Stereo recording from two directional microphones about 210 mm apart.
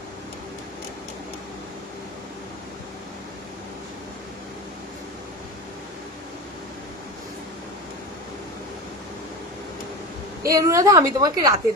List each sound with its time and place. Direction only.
10.4 s a woman's voice: 15° right (ahead or behind)